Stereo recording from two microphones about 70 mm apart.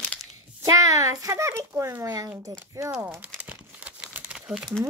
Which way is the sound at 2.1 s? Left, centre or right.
Right.